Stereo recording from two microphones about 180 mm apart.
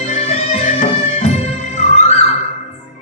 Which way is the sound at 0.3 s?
40° left (ahead or behind).